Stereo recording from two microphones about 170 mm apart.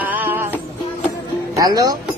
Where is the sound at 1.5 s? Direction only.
20° right (ahead or behind).